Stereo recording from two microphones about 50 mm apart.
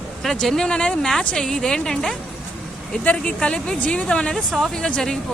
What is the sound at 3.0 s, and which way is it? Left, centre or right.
Speech, left.